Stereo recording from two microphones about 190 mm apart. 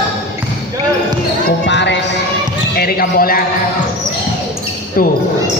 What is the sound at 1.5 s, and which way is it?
Basketball bounce, 70° left (ahead or behind).